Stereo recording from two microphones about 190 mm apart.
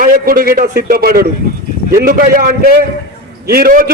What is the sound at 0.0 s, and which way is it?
A man's voice, 50° right (ahead or behind).